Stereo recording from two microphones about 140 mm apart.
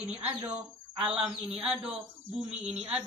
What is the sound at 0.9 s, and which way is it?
Speech, 5° right (ahead or behind).